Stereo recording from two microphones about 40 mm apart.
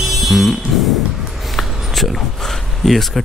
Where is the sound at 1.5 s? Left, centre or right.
Centre.